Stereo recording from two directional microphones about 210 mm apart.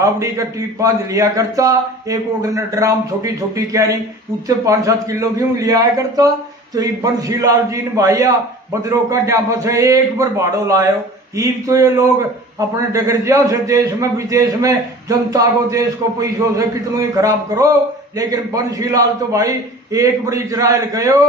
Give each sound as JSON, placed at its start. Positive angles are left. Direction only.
{"t": 0.0, "sound": "a man's voice", "side_deg": -15}